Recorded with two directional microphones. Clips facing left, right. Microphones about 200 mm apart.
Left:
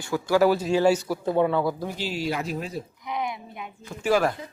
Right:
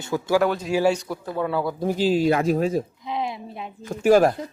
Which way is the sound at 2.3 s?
50° right (ahead or behind).